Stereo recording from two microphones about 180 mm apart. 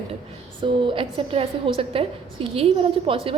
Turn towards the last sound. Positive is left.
turn(degrees=-30)  # may be behind; listen again after turning